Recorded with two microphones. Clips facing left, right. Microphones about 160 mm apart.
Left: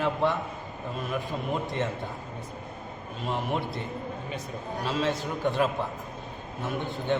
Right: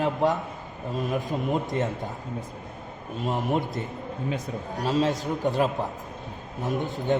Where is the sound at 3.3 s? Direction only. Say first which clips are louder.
Right 3 dB; 40° right (ahead or behind).